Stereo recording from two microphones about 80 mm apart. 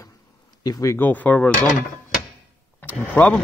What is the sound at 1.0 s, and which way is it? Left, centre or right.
Speech, left.